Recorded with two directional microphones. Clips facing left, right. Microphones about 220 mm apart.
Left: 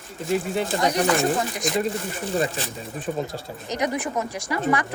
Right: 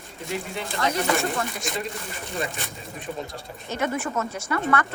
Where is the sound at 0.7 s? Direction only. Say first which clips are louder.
Left 2 dB; 15° left (ahead or behind).